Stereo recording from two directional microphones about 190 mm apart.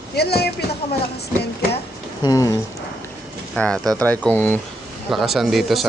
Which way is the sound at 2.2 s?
20° left (ahead or behind).